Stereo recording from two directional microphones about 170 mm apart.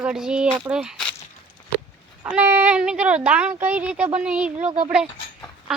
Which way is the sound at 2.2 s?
10° right (ahead or behind).